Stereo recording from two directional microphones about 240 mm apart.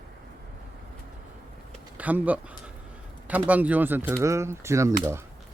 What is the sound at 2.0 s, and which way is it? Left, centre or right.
Speech, centre.